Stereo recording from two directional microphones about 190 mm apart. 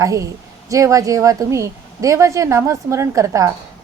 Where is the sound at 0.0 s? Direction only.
15° right (ahead or behind).